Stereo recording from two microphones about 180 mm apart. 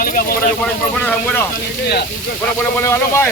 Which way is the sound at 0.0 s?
50° left (ahead or behind).